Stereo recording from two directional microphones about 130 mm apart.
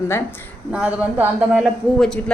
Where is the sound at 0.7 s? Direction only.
10° right (ahead or behind).